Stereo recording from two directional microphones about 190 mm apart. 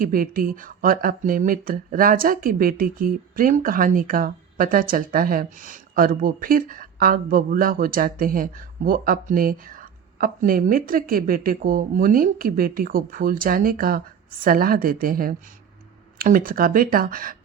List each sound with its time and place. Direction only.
0.0 s speech: 50° right (ahead or behind)